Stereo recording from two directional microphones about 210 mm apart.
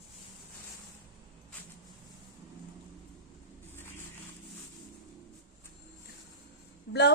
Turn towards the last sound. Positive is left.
turn(degrees=50)  # may be behind; listen again after turning